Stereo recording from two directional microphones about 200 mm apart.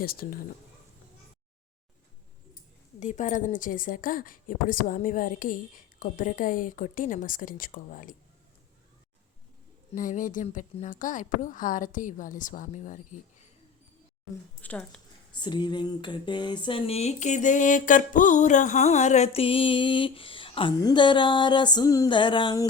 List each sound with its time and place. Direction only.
0.0 s a woman's voice: 50° left (ahead or behind)
3.0 s a woman's voice: 35° left (ahead or behind)
9.9 s speech: 40° left (ahead or behind)
14.6 s speech: 5° left (ahead or behind)
15.4 s speech: 20° left (ahead or behind)